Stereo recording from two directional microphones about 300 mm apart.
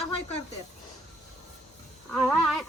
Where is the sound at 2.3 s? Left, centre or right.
Centre.